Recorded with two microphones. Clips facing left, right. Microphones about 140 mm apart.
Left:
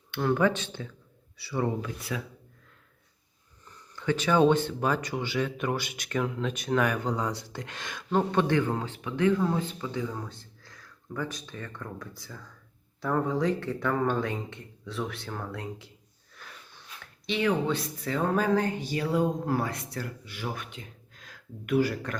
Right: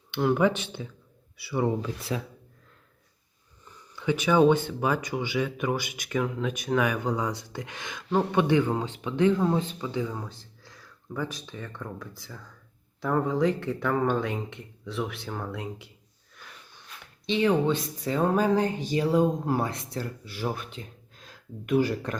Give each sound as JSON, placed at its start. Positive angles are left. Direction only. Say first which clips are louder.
{"t": 0.1, "sound": "speech", "louder": "right 2 dB", "side_deg": -15}
{"t": 1.8, "sound": "speech", "louder": "right 3 dB", "side_deg": -30}
{"t": 3.9, "sound": "speech", "louder": "right 2 dB", "side_deg": -15}
{"t": 8.3, "sound": "speech", "louder": "right 2 dB", "side_deg": -15}
{"t": 17.2, "sound": "speech", "louder": "right 3 dB", "side_deg": -25}